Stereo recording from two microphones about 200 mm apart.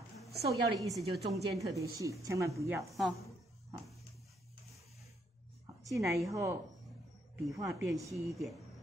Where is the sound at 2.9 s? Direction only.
Centre (ahead or behind).